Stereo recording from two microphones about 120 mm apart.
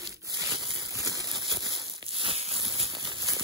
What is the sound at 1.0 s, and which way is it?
Rain, 30° right (ahead or behind).